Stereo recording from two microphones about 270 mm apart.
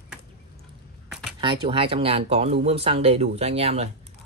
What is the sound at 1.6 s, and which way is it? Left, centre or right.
Speech, centre.